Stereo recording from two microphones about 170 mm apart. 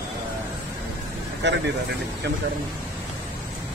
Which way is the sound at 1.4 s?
90° right.